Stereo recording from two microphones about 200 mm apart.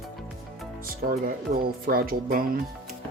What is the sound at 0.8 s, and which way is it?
Speech, 45° right (ahead or behind).